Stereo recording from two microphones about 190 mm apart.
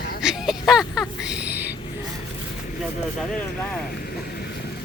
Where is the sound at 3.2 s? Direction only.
5° left (ahead or behind).